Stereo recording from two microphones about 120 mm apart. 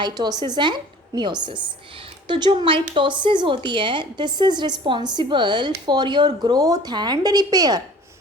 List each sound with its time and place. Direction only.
0.0 s speech: 35° right (ahead or behind)